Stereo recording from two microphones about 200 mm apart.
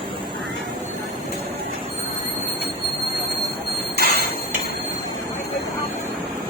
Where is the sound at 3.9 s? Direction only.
50° left (ahead or behind).